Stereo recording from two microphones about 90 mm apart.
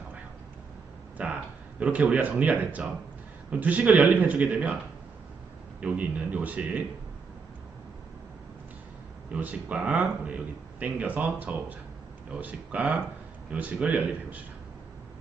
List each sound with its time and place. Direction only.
1.1 s a sound: 15° right (ahead or behind)
1.8 s speech: 15° right (ahead or behind)
5.8 s speech: 15° right (ahead or behind)
9.3 s speech: 15° right (ahead or behind)